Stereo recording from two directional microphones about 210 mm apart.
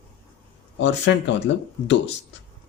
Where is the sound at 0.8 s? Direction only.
55° left (ahead or behind).